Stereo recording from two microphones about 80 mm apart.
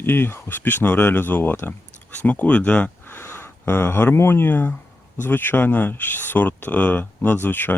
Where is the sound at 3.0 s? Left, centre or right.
Left.